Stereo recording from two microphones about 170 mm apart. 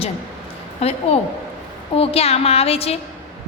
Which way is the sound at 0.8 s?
35° left (ahead or behind).